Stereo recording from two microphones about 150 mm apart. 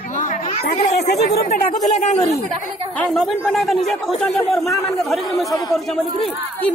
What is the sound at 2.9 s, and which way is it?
Speech, 5° left (ahead or behind).